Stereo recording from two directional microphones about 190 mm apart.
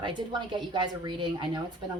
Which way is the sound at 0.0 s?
25° right (ahead or behind).